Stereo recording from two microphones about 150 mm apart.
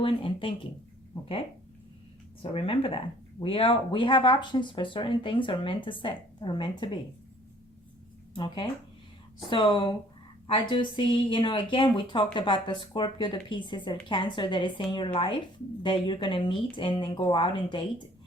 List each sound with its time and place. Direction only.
0.0 s a woman's voice: 35° left (ahead or behind)
9.5 s a woman's voice: 30° left (ahead or behind)